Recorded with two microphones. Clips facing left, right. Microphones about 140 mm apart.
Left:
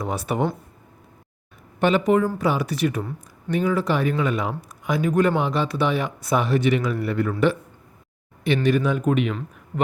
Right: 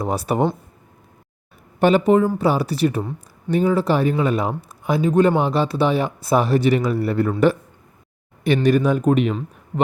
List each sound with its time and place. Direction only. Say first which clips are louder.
0.0 s speech: right 4 dB; 35° right (ahead or behind)
1.8 s speech: right 4 dB; 35° right (ahead or behind)